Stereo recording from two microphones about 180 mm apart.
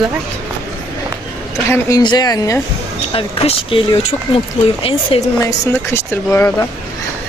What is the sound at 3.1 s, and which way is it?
Speech, 30° left (ahead or behind).